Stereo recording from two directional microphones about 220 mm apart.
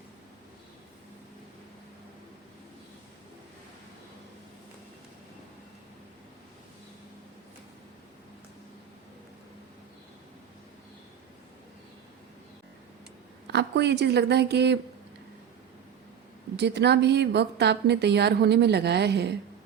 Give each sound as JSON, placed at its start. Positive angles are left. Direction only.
{"t": 13.5, "sound": "a woman's voice", "side_deg": -50}
{"t": 16.6, "sound": "a woman's voice", "side_deg": -50}